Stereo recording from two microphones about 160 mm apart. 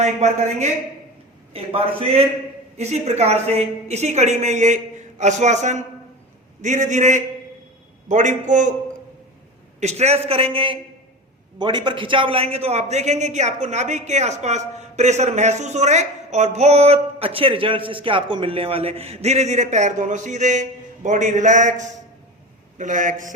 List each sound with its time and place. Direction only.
0.0 s a man's voice: 45° right (ahead or behind)
9.8 s a man's voice: 40° right (ahead or behind)